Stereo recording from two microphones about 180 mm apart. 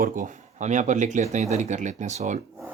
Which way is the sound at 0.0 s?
45° right (ahead or behind).